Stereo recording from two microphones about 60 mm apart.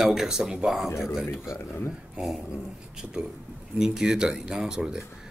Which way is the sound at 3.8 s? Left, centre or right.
Centre.